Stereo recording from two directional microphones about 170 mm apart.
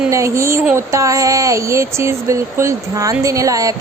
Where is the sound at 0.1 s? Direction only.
15° right (ahead or behind).